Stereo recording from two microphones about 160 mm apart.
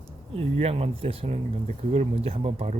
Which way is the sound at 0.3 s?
40° right (ahead or behind).